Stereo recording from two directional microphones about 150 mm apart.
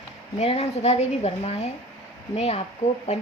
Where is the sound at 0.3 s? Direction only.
45° left (ahead or behind).